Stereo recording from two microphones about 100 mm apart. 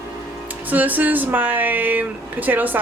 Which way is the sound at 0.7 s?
15° right (ahead or behind).